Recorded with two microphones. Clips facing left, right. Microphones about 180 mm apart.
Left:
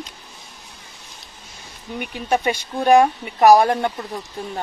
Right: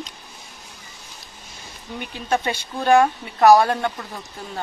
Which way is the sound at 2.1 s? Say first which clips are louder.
Left 2 dB; 15° left (ahead or behind).